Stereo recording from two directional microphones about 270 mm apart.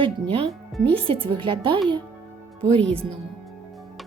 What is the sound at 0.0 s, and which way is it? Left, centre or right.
Speech, right.